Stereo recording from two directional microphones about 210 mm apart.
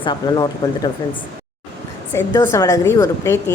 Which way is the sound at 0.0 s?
20° left (ahead or behind).